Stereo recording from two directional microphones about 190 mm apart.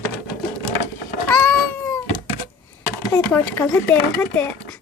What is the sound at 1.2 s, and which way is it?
Cat, 10° left (ahead or behind).